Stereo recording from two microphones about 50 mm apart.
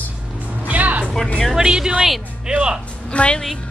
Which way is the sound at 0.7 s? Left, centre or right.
Right.